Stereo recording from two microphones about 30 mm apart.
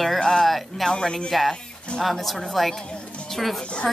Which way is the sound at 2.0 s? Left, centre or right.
Centre.